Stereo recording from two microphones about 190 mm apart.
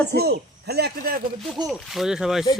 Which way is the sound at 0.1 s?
55° right (ahead or behind).